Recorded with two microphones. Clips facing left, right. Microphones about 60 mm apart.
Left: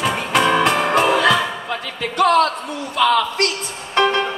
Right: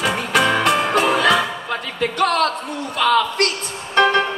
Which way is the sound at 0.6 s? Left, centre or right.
Left.